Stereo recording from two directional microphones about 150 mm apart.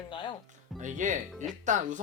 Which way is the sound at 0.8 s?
55° right (ahead or behind).